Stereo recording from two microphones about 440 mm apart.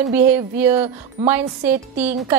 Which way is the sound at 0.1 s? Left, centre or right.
Centre.